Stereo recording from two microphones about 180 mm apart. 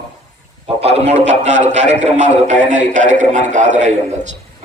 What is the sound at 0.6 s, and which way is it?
A man's voice, 35° right (ahead or behind).